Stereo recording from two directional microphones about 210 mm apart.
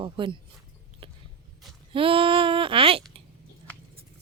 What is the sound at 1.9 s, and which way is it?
Speech, 25° right (ahead or behind).